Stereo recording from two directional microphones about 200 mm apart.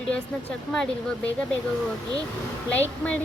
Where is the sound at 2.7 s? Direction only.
10° left (ahead or behind).